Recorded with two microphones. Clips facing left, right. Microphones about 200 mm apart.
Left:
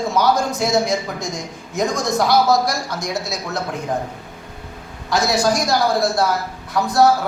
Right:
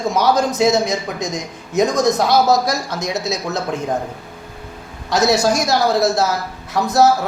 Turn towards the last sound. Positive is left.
turn(degrees=-20)  # may be behind; listen again after turning